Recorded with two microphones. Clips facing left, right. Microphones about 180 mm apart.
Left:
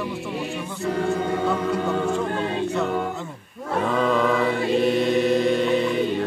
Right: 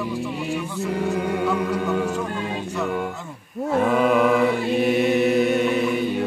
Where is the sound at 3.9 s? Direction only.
10° right (ahead or behind).